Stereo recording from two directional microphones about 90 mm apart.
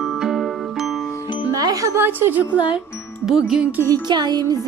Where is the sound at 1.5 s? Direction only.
40° right (ahead or behind).